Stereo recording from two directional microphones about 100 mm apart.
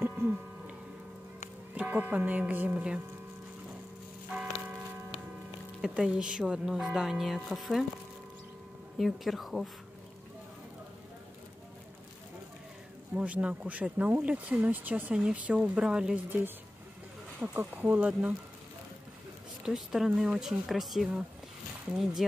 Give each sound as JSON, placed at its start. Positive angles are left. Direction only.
{"t": 0.2, "sound": "a sound", "side_deg": -25}
{"t": 1.8, "sound": "speech", "side_deg": -20}
{"t": 5.8, "sound": "speech", "side_deg": -5}
{"t": 8.9, "sound": "speech", "side_deg": 0}
{"t": 13.1, "sound": "speech", "side_deg": -15}
{"t": 16.3, "sound": "speech", "side_deg": -20}
{"t": 19.6, "sound": "speech", "side_deg": -5}